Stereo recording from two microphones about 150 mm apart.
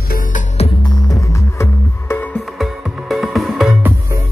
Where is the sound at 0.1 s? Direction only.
60° left (ahead or behind).